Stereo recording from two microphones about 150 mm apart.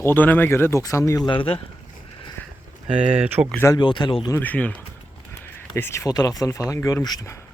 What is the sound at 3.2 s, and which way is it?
Speech, 10° right (ahead or behind).